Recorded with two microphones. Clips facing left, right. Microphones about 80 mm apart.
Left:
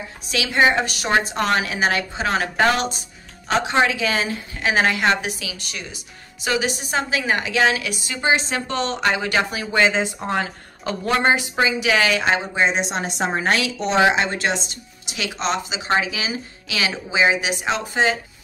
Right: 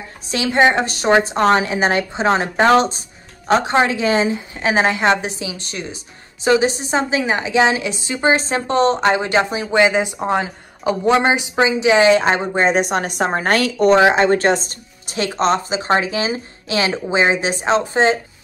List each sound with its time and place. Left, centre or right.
0.3 s a woman's voice: right